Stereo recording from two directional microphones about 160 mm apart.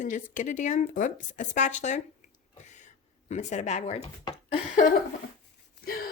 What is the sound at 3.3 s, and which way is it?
Speech, 45° left (ahead or behind).